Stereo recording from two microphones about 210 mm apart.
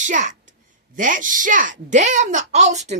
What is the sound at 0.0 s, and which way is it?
Speech, 35° right (ahead or behind).